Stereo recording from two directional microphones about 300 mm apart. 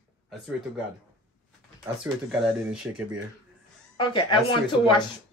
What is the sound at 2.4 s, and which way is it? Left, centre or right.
Speech, centre.